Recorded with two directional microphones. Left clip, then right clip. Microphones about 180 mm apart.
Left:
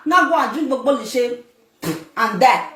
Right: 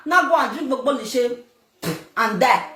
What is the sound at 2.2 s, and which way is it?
Speech, 25° right (ahead or behind).